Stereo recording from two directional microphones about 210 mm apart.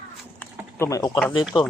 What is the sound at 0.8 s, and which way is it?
Speech, 15° left (ahead or behind).